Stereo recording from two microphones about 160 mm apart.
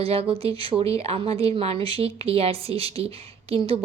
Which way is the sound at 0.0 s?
40° right (ahead or behind).